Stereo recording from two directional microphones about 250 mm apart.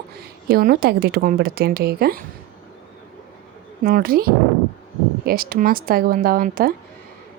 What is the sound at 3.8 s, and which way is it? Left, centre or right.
A woman's voice, right.